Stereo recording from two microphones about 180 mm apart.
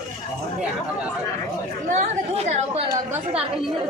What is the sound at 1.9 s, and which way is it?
Speech, 40° right (ahead or behind).